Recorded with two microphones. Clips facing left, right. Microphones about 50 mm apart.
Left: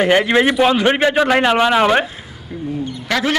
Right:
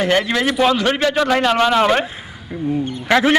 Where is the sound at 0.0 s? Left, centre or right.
Left.